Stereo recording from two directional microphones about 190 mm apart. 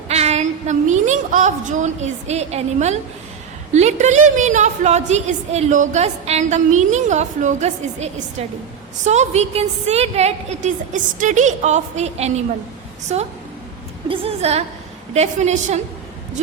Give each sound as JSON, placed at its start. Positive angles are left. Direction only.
{"t": 0.1, "sound": "a woman's voice", "side_deg": -35}